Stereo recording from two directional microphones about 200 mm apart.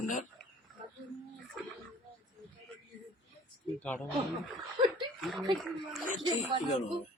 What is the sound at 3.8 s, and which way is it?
Speech, 5° left (ahead or behind).